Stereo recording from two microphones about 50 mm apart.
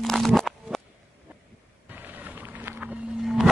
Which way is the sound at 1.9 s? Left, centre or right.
Right.